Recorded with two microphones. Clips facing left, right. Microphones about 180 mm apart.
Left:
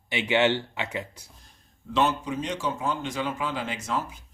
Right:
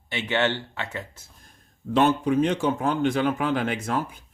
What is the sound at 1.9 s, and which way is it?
Speech, 55° right (ahead or behind).